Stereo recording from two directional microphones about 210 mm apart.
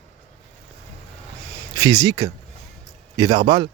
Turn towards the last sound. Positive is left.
turn(degrees=-25)  # may be behind; listen again after turning